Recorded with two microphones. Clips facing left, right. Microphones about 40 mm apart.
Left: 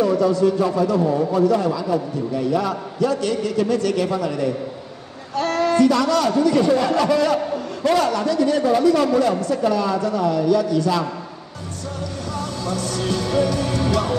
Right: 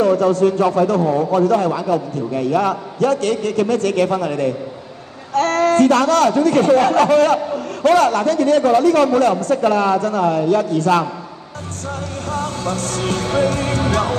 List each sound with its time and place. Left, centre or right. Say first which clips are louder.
0.0 s a man's voice: right 3 dB; right
12.3 s music: right 5 dB; right